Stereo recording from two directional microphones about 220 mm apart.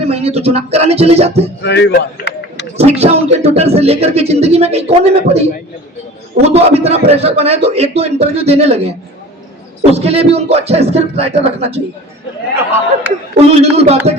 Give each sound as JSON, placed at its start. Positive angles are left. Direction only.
{"t": 0.0, "sound": "speech", "side_deg": -30}
{"t": 1.6, "sound": "speech", "side_deg": 50}
{"t": 2.7, "sound": "speech", "side_deg": -30}
{"t": 6.4, "sound": "speech", "side_deg": -30}
{"t": 9.9, "sound": "speech", "side_deg": -25}
{"t": 13.3, "sound": "speech", "side_deg": -30}